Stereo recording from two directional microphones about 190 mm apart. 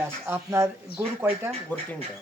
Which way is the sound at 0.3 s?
15° right (ahead or behind).